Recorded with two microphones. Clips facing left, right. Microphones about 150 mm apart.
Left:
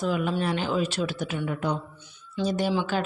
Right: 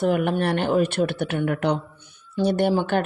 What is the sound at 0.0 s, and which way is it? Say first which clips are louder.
Speech: right 5 dB; 60° right (ahead or behind).